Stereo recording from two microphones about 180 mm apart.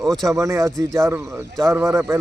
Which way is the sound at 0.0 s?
Centre (ahead or behind).